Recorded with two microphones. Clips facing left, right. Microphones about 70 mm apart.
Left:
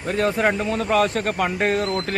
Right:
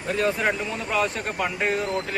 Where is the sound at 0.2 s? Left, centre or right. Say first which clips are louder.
Left 4 dB; left.